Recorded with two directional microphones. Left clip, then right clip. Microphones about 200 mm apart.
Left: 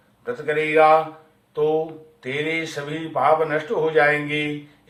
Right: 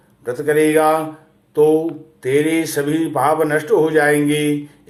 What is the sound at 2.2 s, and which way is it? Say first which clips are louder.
Speech: right 8 dB; 40° right (ahead or behind).